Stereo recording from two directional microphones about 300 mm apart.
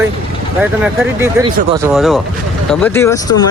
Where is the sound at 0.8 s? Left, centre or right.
Centre.